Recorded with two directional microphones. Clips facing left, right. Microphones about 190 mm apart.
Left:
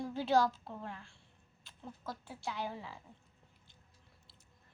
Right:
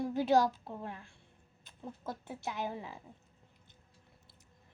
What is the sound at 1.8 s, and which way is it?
A woman's voice, 20° right (ahead or behind).